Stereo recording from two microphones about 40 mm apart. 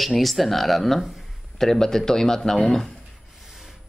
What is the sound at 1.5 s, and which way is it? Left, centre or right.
Speech, centre.